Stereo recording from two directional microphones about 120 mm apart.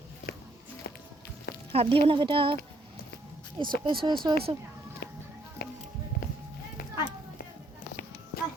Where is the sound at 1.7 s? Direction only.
50° right (ahead or behind).